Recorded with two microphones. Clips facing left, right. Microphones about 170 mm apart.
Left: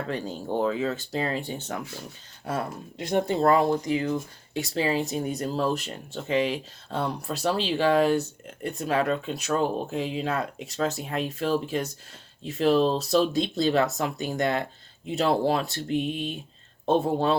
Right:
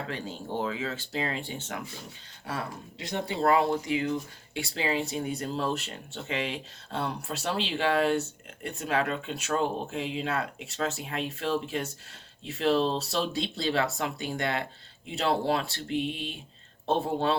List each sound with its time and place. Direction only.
0.1 s speech: 40° left (ahead or behind)
2.5 s speech: 50° left (ahead or behind)